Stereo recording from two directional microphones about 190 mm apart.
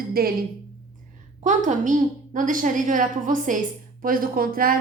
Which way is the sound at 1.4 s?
40° right (ahead or behind).